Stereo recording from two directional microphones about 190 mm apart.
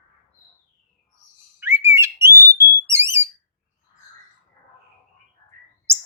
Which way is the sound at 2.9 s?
15° right (ahead or behind).